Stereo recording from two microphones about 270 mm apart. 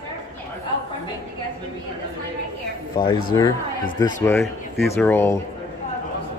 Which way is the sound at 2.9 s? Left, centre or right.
Centre.